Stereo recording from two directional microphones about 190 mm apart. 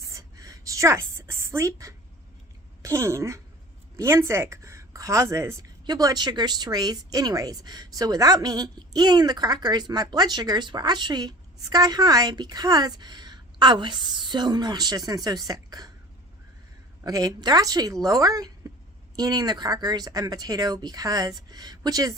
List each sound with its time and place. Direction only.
0.0 s a sound: 15° right (ahead or behind)
2.8 s a woman's voice: 15° right (ahead or behind)
17.0 s speech: 20° right (ahead or behind)